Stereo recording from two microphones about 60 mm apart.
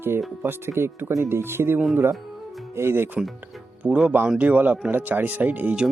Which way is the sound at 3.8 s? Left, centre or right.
Right.